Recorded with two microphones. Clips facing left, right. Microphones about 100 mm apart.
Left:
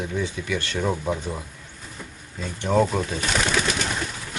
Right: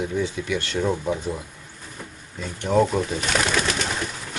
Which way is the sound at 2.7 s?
Centre (ahead or behind).